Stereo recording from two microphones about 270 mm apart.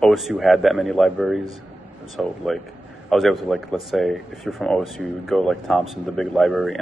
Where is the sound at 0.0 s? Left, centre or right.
Centre.